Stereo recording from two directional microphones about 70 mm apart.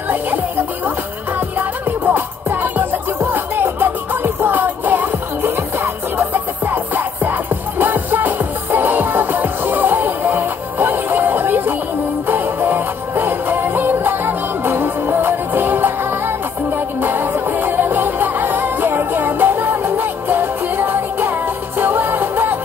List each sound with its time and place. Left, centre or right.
1.6 s music: right